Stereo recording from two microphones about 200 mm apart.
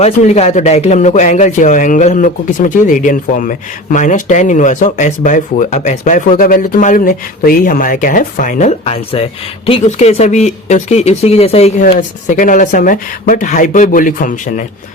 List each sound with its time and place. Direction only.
0.0 s speech: 30° left (ahead or behind)